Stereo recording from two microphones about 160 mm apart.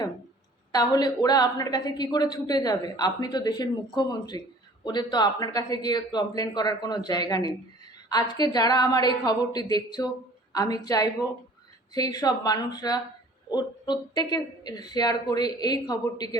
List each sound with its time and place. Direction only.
0.7 s a woman's voice: 25° left (ahead or behind)